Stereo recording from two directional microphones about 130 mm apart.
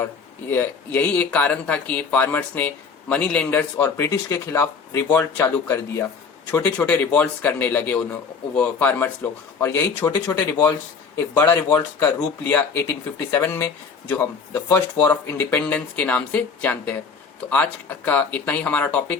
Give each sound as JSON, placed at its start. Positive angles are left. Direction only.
{"t": 0.5, "sound": "a man's voice", "side_deg": 15}
{"t": 3.8, "sound": "a man's voice", "side_deg": 20}
{"t": 15.4, "sound": "a man's voice", "side_deg": 10}